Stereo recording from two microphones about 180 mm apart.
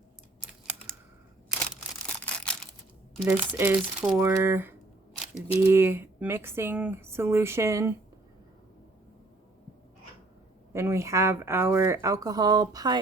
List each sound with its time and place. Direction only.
1.5 s single-lens reflex camera: centre (ahead or behind)
3.2 s speech: 10° right (ahead or behind)
10.7 s speech: 15° right (ahead or behind)